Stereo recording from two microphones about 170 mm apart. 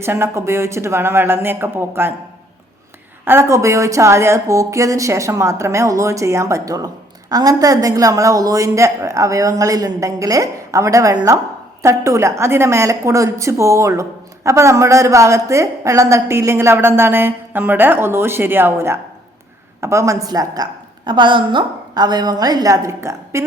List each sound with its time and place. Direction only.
0.0 s a woman's voice: 15° right (ahead or behind)
3.2 s a woman's voice: 15° right (ahead or behind)